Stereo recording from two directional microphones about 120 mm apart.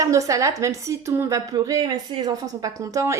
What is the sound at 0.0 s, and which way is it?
Speech, 25° right (ahead or behind).